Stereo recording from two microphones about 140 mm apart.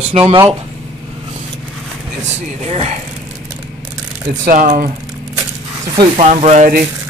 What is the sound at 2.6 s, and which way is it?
Speech, 50° right (ahead or behind).